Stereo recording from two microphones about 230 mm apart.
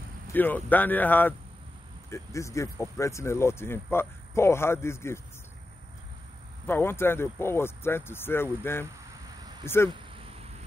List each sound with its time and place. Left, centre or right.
0.3 s speech: centre
6.6 s speech: centre
9.8 s a sound: right